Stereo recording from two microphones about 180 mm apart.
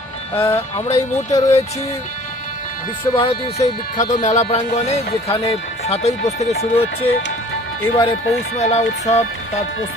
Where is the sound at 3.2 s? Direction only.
35° left (ahead or behind).